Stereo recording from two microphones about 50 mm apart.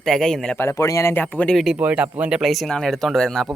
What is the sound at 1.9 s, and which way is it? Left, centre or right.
Speech, right.